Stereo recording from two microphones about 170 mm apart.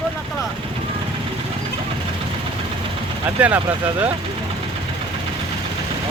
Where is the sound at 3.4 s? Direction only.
10° right (ahead or behind).